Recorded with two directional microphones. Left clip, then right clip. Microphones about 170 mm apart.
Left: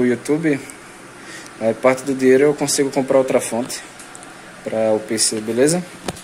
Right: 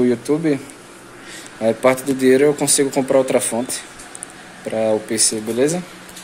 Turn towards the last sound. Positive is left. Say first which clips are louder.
# left 2 dB
turn(degrees=5)  # may be behind; listen again after turning